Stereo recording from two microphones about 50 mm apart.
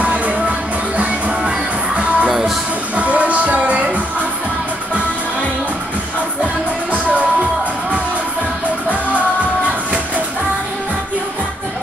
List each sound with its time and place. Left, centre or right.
0.0 s music: right
2.2 s music: centre
3.0 s music: right
6.4 s music: right